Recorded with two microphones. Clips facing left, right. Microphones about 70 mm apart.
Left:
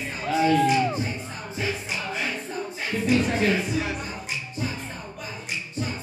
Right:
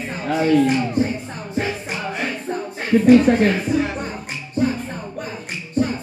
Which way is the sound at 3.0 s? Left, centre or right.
Right.